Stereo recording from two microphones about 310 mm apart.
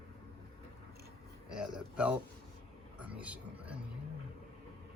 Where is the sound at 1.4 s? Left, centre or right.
Centre.